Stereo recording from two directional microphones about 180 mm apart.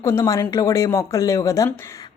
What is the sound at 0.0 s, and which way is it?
Speech, 15° left (ahead or behind).